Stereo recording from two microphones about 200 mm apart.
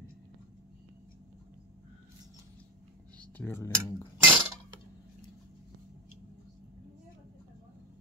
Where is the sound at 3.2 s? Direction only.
10° left (ahead or behind).